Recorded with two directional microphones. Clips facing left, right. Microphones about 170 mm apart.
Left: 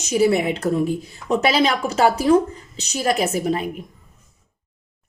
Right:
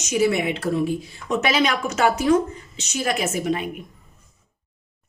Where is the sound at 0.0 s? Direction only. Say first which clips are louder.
Left 3 dB; 35° left (ahead or behind).